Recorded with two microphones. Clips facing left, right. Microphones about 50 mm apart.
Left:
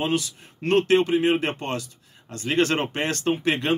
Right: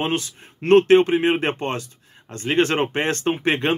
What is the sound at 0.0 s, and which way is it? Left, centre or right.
Speech, right.